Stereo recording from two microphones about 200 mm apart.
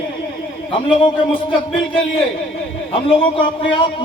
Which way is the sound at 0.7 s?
25° left (ahead or behind).